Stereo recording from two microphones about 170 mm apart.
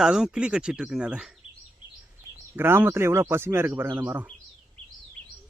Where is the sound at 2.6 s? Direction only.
15° right (ahead or behind).